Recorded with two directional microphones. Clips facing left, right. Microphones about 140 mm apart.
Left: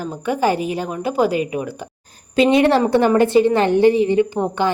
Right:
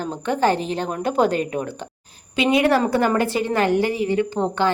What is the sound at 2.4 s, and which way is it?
A woman's voice, 30° left (ahead or behind).